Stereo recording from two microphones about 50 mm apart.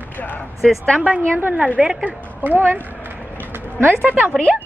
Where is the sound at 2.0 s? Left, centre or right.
Right.